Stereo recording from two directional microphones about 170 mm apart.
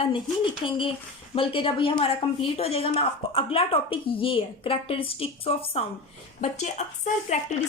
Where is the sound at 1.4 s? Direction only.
30° left (ahead or behind).